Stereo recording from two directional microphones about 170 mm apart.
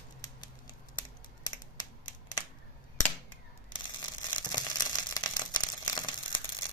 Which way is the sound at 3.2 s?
25° left (ahead or behind).